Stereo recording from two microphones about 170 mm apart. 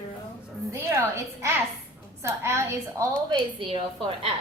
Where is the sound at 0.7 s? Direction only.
15° right (ahead or behind).